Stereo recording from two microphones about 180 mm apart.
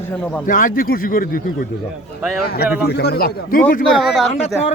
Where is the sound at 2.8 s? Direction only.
65° left (ahead or behind).